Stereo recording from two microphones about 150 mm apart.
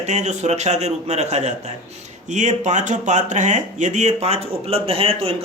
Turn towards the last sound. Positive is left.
turn(degrees=-40)  # may be behind; listen again after turning